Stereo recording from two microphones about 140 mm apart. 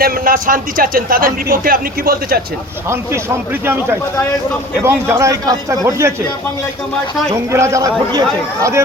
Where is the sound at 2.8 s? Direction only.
20° right (ahead or behind).